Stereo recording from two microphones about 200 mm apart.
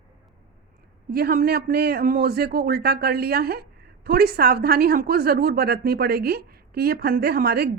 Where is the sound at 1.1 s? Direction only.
50° right (ahead or behind).